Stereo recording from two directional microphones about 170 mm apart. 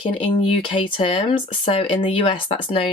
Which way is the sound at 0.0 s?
30° left (ahead or behind).